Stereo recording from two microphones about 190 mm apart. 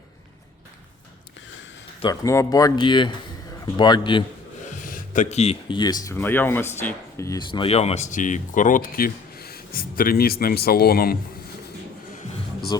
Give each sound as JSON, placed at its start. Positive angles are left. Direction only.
{"t": 2.0, "sound": "speech", "side_deg": 20}
{"t": 4.7, "sound": "speech", "side_deg": 45}
{"t": 12.7, "sound": "speech", "side_deg": 20}